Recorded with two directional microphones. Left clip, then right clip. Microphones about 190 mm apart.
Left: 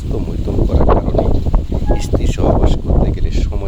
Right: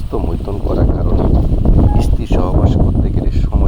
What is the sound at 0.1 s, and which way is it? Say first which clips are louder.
Speech: right 4 dB; 10° right (ahead or behind).